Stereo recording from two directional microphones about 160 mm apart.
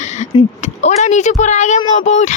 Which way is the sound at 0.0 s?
50° left (ahead or behind).